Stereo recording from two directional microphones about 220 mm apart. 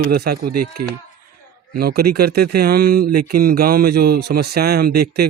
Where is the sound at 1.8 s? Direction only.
45° right (ahead or behind).